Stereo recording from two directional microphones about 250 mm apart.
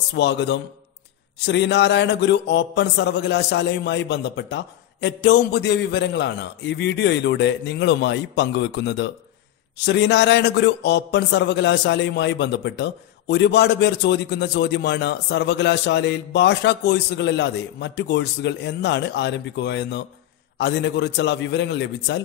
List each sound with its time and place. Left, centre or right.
0.1 s a man's voice: left